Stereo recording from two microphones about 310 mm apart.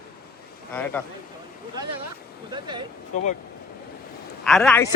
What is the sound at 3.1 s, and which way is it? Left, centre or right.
Speech, left.